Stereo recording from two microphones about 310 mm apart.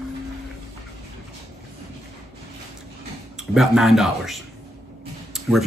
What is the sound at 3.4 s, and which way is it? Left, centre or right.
Speech, centre.